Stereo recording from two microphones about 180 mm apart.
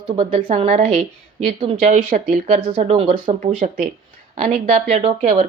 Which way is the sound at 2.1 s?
50° right (ahead or behind).